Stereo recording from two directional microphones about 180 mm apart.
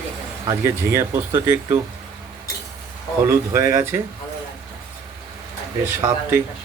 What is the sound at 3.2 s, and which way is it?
Speech, 15° right (ahead or behind).